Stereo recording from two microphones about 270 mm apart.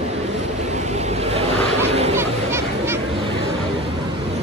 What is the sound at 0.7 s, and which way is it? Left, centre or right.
Vehicle, right.